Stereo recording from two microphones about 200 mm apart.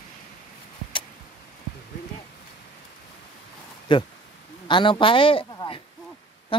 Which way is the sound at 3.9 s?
25° left (ahead or behind).